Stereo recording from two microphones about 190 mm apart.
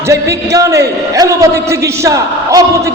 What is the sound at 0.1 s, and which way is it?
A man's voice, 15° right (ahead or behind).